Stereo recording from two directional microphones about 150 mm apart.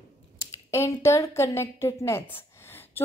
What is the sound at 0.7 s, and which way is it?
A woman's voice, 20° left (ahead or behind).